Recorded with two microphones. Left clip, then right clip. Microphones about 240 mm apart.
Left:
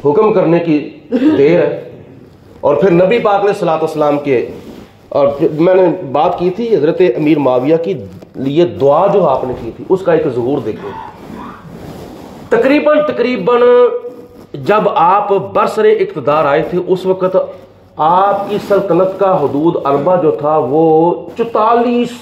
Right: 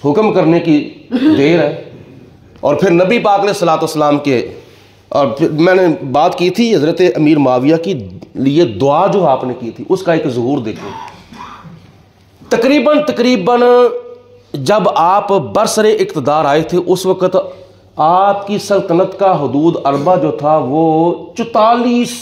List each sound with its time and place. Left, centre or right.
0.0 s a man's voice: right
2.6 s a man's voice: right
12.4 s a man's voice: right